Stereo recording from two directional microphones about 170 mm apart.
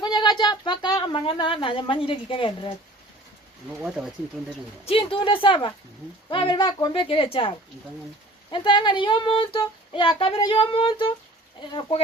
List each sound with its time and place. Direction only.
0.0 s speech: 25° left (ahead or behind)
3.8 s speech: 5° right (ahead or behind)
4.9 s a woman's voice: 30° left (ahead or behind)